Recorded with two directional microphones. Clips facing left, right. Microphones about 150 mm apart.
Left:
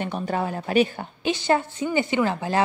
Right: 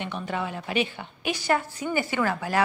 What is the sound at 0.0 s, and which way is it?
Speech, 40° left (ahead or behind).